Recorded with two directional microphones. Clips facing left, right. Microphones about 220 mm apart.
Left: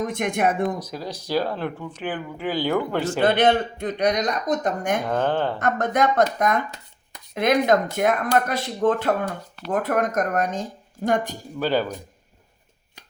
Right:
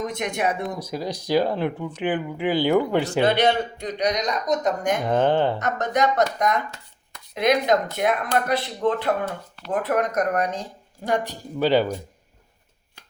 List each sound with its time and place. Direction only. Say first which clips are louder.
0.0 s speech: left 2 dB; 50° left (ahead or behind)
0.8 s speech: right 3 dB; 10° right (ahead or behind)
3.2 s speech: left 2 dB; 50° left (ahead or behind)
5.0 s speech: right 6 dB; 15° right (ahead or behind)
5.5 s speech: left 1 dB; 55° left (ahead or behind)
11.6 s speech: right 3 dB; 15° right (ahead or behind)